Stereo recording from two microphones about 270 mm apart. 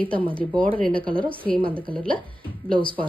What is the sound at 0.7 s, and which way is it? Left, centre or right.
Speech, centre.